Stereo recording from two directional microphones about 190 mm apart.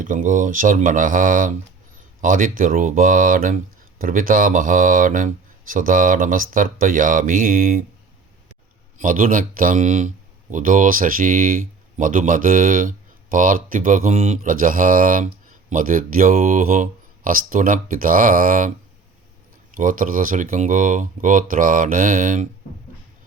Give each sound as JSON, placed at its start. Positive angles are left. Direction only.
{"t": 0.0, "sound": "speech", "side_deg": -45}
{"t": 9.0, "sound": "speech", "side_deg": -45}
{"t": 19.7, "sound": "speech", "side_deg": -45}